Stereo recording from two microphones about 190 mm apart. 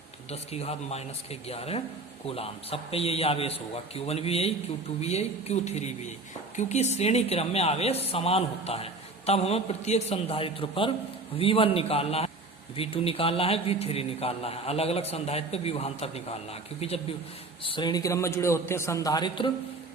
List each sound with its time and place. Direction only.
0.3 s a man's voice: 35° left (ahead or behind)